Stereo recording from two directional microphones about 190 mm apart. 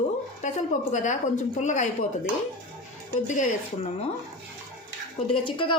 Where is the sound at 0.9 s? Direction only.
40° left (ahead or behind).